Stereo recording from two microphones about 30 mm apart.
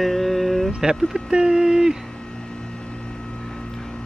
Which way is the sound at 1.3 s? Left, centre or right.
Right.